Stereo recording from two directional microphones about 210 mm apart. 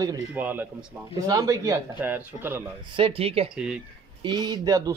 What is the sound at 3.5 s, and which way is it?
Speech, 5° right (ahead or behind).